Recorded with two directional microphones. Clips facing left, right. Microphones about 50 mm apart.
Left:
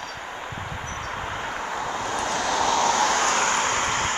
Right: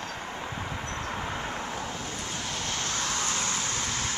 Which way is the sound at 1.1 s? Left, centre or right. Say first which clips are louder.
Left 3 dB; centre.